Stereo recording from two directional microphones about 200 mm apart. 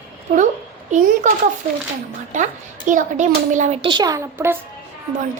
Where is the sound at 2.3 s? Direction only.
40° right (ahead or behind); by 4.6 s 10° right (ahead or behind).